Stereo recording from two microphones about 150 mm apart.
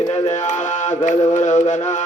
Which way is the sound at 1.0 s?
55° left (ahead or behind).